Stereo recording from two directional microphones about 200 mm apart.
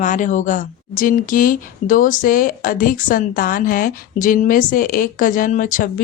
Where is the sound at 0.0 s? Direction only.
40° left (ahead or behind).